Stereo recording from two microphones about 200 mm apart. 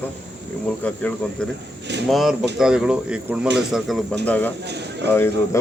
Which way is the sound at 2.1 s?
Centre (ahead or behind).